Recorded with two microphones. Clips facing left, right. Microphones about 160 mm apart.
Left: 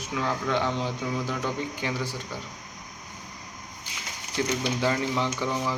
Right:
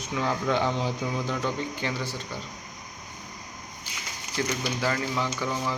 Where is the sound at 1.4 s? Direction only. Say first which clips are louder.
Even; 15° left (ahead or behind).